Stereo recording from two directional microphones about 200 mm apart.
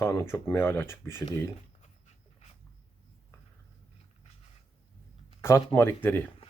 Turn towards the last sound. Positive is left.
turn(degrees=10)  # may be behind; listen again after turning